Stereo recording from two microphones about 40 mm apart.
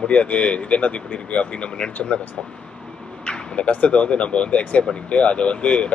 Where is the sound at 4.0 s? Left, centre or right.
Left.